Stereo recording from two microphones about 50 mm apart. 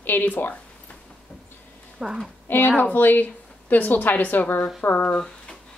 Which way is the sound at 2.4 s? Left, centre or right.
Left.